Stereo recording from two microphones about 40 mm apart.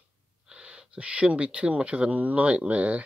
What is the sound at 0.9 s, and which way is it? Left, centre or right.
Speech, right.